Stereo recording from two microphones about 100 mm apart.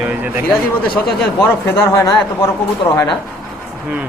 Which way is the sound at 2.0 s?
40° left (ahead or behind).